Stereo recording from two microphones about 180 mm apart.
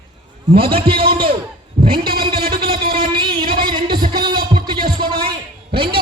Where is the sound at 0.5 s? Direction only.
30° right (ahead or behind).